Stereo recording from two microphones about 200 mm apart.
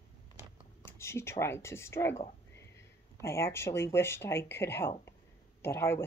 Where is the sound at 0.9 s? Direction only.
15° left (ahead or behind).